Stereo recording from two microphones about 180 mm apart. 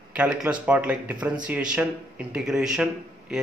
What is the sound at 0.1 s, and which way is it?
A man's voice, 5° right (ahead or behind).